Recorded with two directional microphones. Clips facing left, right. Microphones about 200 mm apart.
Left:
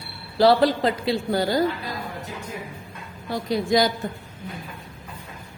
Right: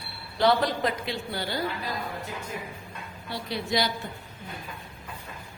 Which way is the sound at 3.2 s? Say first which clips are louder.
Left 8 dB; 45° left (ahead or behind).